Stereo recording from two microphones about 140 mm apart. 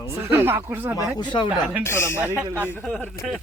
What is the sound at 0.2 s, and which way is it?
Speech, 15° right (ahead or behind).